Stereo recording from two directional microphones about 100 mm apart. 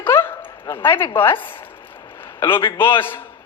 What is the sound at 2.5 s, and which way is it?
Speech, 25° left (ahead or behind).